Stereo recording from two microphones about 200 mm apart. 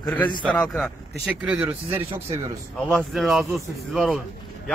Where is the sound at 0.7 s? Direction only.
Centre (ahead or behind).